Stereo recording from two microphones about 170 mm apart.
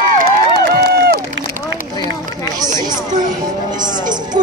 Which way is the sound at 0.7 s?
65° right (ahead or behind).